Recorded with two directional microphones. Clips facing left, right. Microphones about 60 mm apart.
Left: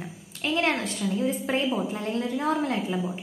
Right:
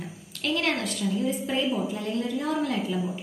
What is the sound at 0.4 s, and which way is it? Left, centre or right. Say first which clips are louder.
A woman's voice: left 1 dB; left.